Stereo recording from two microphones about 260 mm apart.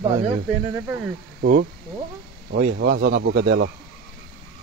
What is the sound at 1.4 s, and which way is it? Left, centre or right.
Speech, right.